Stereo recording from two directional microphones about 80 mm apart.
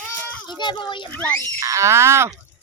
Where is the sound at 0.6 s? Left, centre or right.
Left.